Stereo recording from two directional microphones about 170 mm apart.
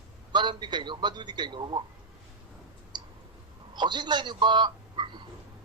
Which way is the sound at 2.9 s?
25° right (ahead or behind).